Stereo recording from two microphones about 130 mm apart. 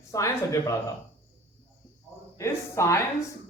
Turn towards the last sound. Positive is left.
turn(degrees=20)  # may be behind; listen again after turning